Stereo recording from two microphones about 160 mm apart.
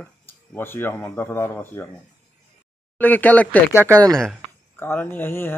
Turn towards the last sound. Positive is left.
turn(degrees=15)  # may be behind; listen again after turning